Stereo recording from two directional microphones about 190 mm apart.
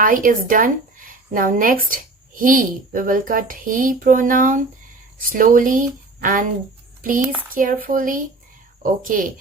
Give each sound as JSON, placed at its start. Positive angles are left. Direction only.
{"t": 0.0, "sound": "speech", "side_deg": -45}
{"t": 7.5, "sound": "speech", "side_deg": -45}